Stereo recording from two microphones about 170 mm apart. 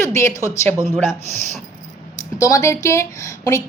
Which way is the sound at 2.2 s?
20° left (ahead or behind).